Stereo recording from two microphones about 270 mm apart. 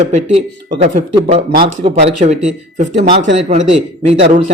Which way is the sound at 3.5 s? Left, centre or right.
Right.